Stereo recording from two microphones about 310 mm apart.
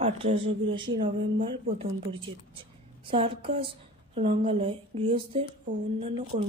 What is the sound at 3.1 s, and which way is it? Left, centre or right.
A woman's voice, centre.